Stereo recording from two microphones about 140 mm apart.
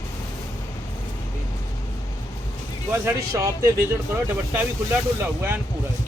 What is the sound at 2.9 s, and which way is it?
A man's voice, 20° right (ahead or behind).